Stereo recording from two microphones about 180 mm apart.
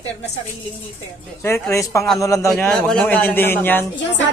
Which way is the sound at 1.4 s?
15° left (ahead or behind).